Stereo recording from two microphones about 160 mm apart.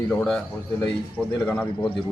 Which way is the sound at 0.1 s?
5° left (ahead or behind).